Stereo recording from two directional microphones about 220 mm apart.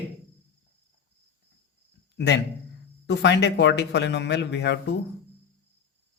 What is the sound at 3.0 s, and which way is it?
A man's voice, 55° left (ahead or behind).